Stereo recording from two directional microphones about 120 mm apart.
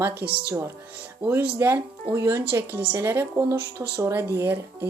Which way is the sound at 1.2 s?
15° right (ahead or behind).